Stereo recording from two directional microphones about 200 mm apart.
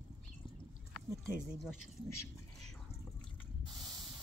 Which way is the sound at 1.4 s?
Centre (ahead or behind).